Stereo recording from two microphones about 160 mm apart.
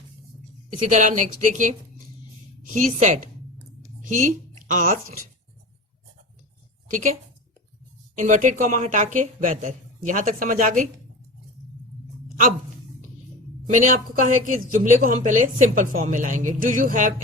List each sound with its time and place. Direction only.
0.9 s a woman's voice: 50° right (ahead or behind)
8.1 s speech: 50° right (ahead or behind)
13.7 s a woman's voice: 50° right (ahead or behind)